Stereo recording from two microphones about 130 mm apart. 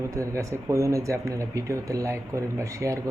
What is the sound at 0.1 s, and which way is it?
Speech, 25° right (ahead or behind).